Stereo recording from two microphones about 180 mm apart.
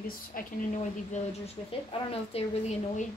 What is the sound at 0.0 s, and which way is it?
Speech, 50° left (ahead or behind).